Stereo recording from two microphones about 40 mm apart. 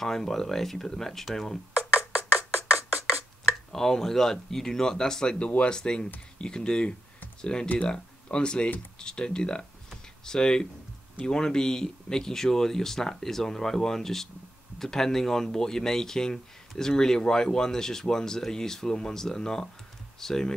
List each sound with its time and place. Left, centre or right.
0.0 s speech: centre
2.5 s music: right
3.7 s speech: centre
7.6 s speech: left
7.9 s speech: left